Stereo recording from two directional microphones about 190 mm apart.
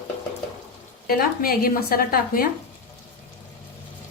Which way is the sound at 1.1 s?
50° left (ahead or behind).